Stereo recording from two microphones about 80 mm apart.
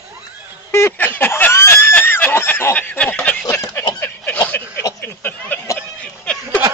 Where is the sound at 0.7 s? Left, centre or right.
Left.